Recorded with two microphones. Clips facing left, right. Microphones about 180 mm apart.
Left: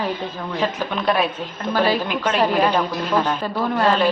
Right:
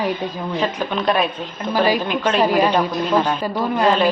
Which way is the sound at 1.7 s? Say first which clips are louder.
Right 2 dB; 10° right (ahead or behind).